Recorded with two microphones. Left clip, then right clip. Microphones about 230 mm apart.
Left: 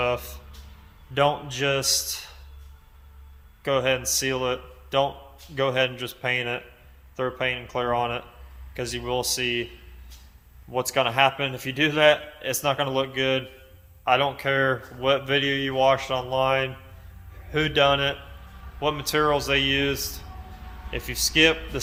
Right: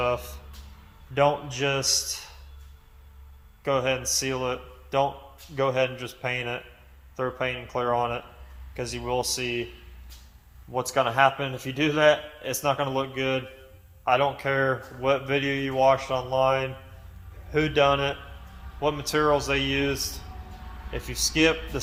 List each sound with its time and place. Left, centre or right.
0.0 s a man's voice: centre
3.6 s a man's voice: centre
10.7 s a man's voice: centre